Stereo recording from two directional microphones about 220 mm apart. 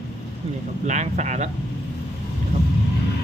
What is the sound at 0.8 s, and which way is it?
Speech, 35° right (ahead or behind).